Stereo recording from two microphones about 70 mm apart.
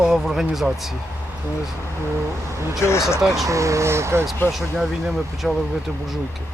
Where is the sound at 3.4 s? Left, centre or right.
Right.